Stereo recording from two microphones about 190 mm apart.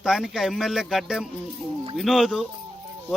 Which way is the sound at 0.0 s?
Centre (ahead or behind).